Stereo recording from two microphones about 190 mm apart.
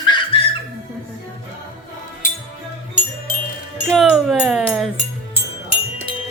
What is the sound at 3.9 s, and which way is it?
Music, centre (ahead or behind).